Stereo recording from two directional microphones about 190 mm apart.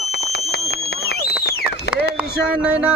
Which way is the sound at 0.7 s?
60° left (ahead or behind).